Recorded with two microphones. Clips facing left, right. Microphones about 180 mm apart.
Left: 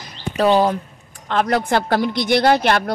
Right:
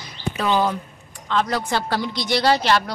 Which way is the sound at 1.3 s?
55° left (ahead or behind).